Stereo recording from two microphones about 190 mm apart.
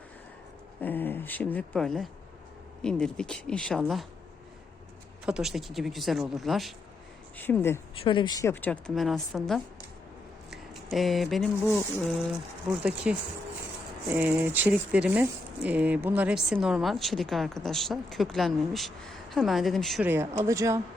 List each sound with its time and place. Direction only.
0.8 s a woman's voice: 10° left (ahead or behind)
5.2 s speech: 5° right (ahead or behind)
7.3 s a woman's voice: 10° left (ahead or behind)
8.0 s a woman's voice: 25° left (ahead or behind); by 9.6 s centre (ahead or behind)
10.5 s a sound: centre (ahead or behind)
12.7 s speech: 5° right (ahead or behind)
20.4 s speech: 15° right (ahead or behind)